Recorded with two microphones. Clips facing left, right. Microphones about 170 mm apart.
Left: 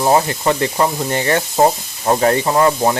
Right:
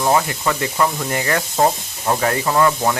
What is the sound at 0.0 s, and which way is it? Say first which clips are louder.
Speech: left 3 dB; 30° left (ahead or behind).